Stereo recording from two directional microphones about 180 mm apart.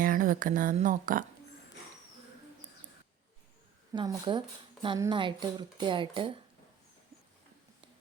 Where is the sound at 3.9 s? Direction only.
25° right (ahead or behind).